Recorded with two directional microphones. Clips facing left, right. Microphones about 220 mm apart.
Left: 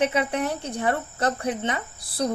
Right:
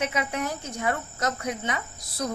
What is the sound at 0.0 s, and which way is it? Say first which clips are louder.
Speech: left 5 dB; 30° left (ahead or behind).